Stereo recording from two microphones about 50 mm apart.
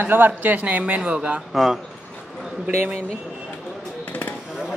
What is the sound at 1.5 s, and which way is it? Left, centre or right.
Speech, centre.